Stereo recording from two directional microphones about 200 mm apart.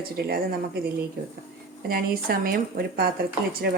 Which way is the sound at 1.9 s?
50° right (ahead or behind).